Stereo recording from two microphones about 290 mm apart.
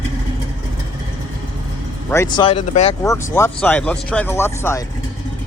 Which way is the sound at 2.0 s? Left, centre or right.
Centre.